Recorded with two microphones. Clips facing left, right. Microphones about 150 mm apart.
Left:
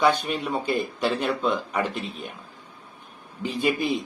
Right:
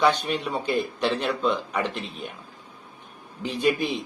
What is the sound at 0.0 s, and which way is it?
Speech, 45° left (ahead or behind).